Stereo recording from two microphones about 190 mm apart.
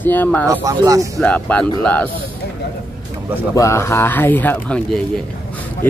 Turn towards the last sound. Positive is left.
turn(degrees=5)  # may be behind; listen again after turning